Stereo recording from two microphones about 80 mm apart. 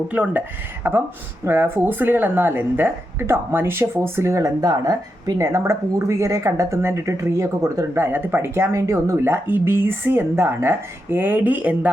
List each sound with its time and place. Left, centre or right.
0.1 s speech: centre; by 9.1 s right
9.1 s speech: right